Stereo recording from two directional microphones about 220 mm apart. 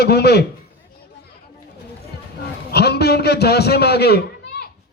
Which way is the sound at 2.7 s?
50° left (ahead or behind).